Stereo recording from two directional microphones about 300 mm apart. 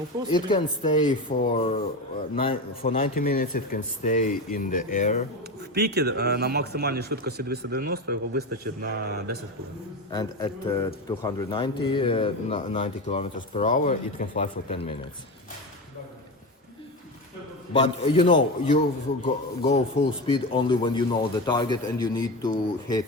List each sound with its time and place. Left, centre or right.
0.3 s a man's voice: centre
5.7 s a man's voice: right
10.1 s a man's voice: centre
17.7 s speech: centre